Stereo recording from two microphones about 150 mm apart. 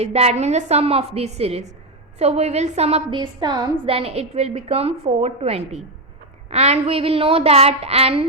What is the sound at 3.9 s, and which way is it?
A woman's voice, 45° right (ahead or behind).